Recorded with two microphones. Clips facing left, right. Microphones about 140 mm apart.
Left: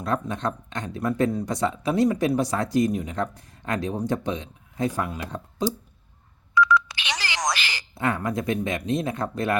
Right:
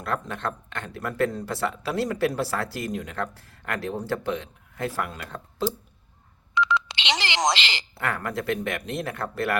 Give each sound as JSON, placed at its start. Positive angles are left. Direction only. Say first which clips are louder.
{"t": 0.0, "sound": "speech", "louder": "left 3 dB", "side_deg": 15}
{"t": 6.5, "sound": "telephone dialing", "louder": "left 4 dB", "side_deg": -25}
{"t": 7.9, "sound": "speech", "louder": "left 4 dB", "side_deg": 15}